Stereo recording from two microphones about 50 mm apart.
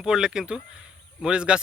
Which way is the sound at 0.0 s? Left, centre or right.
Centre.